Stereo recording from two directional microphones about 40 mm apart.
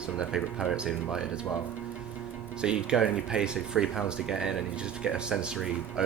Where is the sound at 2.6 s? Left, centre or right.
Right.